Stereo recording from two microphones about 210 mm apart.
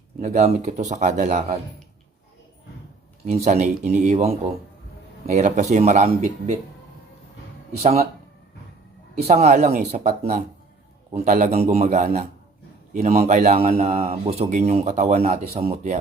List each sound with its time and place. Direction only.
0.2 s speech: 35° right (ahead or behind)
3.2 s speech: 30° right (ahead or behind)
7.8 s speech: 30° right (ahead or behind)
9.2 s speech: 30° right (ahead or behind)